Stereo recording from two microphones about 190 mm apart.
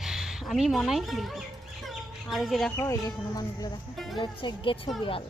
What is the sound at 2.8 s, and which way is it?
Speech, 15° left (ahead or behind).